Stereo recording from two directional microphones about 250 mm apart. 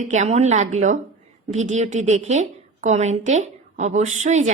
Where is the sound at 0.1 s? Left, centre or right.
Right.